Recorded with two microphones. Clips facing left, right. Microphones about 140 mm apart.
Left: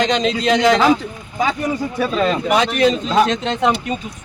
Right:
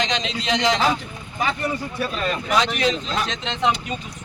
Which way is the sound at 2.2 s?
90° left.